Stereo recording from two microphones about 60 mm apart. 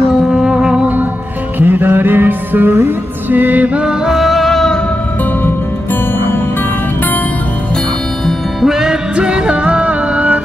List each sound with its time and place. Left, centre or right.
0.3 s music: centre
1.6 s music: right; by 4.1 s centre
4.1 s music: centre
6.1 s music: left
8.3 s music: centre; by 10.4 s right